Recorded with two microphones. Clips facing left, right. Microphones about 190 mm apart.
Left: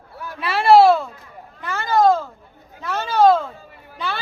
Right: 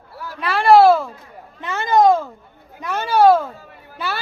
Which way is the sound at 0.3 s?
Centre (ahead or behind).